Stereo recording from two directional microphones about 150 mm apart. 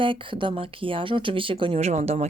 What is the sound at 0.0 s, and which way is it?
Speech, 35° right (ahead or behind).